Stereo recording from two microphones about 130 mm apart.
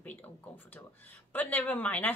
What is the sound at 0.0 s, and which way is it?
Speech, 15° left (ahead or behind).